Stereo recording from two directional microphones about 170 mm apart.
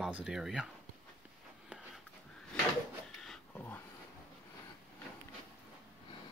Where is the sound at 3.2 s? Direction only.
5° left (ahead or behind).